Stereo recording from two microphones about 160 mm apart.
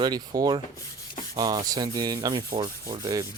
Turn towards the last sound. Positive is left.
turn(degrees=-25)  # may be behind; listen again after turning